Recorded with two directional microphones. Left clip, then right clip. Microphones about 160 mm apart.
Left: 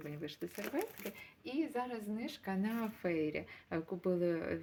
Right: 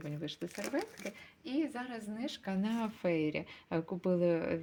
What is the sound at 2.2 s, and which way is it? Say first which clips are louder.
Speech: right 4 dB; 35° right (ahead or behind).